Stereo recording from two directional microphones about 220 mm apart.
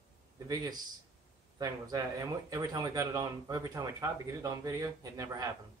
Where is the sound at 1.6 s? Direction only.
15° right (ahead or behind).